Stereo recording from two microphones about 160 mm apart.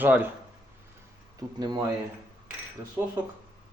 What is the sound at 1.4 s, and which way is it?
Speech, 20° right (ahead or behind).